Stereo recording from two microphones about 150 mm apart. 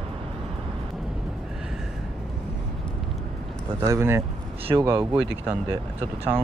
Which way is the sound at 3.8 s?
20° right (ahead or behind).